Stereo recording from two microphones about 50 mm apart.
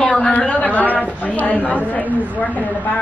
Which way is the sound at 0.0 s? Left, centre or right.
Left.